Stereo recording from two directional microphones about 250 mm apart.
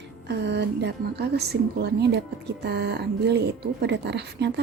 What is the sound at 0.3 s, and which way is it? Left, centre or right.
A woman's voice, right.